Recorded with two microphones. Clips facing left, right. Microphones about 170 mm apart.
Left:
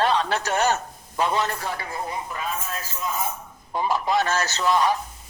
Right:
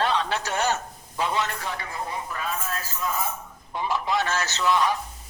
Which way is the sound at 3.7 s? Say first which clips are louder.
Left 3 dB; 40° left (ahead or behind).